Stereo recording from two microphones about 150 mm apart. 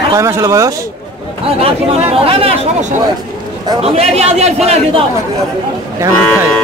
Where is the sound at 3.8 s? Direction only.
45° right (ahead or behind).